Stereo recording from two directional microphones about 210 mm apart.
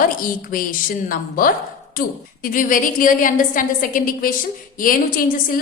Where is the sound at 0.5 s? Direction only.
40° left (ahead or behind).